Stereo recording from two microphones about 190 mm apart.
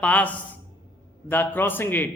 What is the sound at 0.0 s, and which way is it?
A man's voice, 5° left (ahead or behind).